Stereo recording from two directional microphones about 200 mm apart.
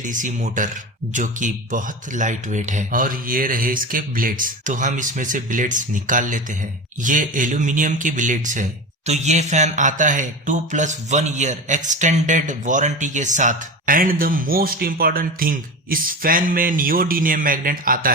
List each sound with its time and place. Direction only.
0.1 s speech: 40° right (ahead or behind)